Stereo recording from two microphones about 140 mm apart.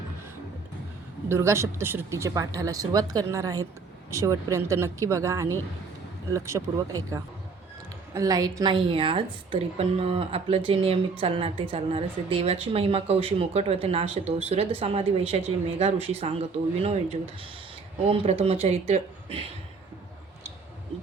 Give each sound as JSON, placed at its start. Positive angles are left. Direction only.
{"t": 1.3, "sound": "a woman's voice", "side_deg": -20}
{"t": 18.1, "sound": "a woman's voice", "side_deg": -45}